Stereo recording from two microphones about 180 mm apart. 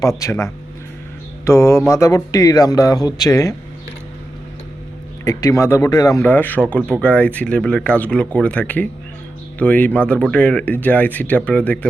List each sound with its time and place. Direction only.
0.2 s speech: 15° left (ahead or behind)
5.2 s speech: 20° left (ahead or behind)